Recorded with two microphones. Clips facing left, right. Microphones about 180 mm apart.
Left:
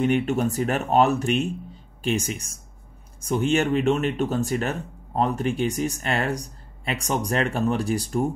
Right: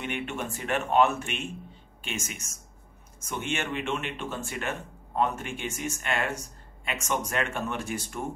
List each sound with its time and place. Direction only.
0.0 s speech: 40° left (ahead or behind)